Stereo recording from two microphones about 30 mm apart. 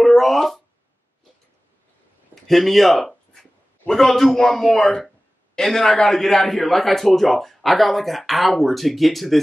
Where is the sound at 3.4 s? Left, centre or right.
Centre.